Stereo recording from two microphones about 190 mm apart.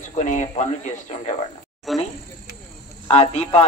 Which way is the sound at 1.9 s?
Centre (ahead or behind).